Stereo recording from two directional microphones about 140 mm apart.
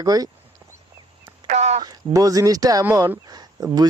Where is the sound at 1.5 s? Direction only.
55° right (ahead or behind).